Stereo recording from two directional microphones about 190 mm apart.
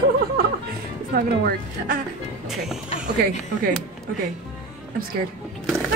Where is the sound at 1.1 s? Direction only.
55° right (ahead or behind).